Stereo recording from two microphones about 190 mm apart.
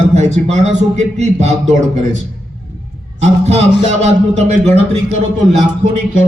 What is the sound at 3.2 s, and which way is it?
Speech, 35° right (ahead or behind).